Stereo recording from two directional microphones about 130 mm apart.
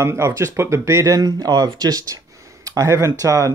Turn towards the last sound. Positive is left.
turn(degrees=-25)  # may be behind; listen again after turning